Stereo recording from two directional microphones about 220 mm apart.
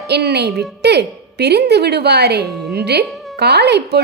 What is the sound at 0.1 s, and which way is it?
A woman's voice, 50° right (ahead or behind).